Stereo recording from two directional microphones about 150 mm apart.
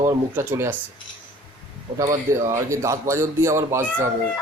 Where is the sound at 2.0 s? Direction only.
25° right (ahead or behind).